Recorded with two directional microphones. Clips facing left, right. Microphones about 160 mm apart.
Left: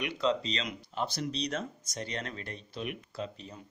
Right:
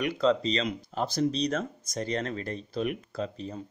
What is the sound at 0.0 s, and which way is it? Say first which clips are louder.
Speech: right 5 dB; 40° right (ahead or behind).